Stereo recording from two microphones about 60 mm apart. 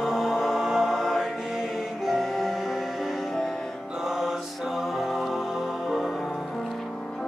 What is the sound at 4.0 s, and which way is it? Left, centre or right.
Music, centre.